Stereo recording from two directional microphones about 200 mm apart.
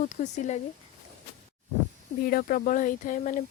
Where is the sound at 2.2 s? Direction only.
45° left (ahead or behind).